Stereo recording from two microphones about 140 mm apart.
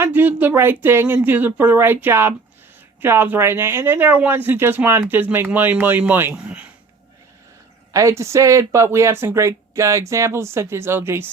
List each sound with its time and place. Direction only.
0.0 s speech: 15° right (ahead or behind)
7.9 s speech: 20° right (ahead or behind)